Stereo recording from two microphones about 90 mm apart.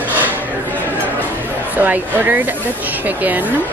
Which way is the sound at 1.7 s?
20° right (ahead or behind).